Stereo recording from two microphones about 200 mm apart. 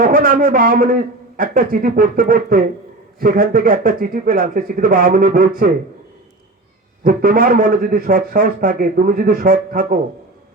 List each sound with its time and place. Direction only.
0.0 s a man's voice: 45° right (ahead or behind)
7.0 s a man's voice: 45° right (ahead or behind)